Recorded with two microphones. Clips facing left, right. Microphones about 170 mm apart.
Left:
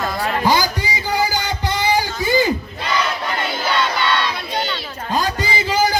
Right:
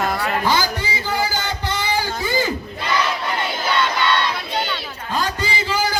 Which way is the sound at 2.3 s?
15° left (ahead or behind).